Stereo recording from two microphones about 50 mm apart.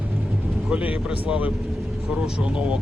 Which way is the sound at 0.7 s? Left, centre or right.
Right.